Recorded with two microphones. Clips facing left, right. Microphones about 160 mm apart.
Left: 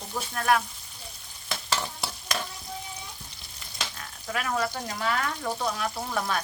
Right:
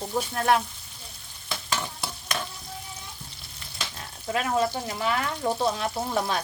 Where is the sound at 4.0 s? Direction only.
30° right (ahead or behind).